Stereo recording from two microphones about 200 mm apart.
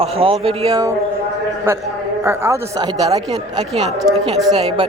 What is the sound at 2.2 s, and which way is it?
Speech, 15° right (ahead or behind).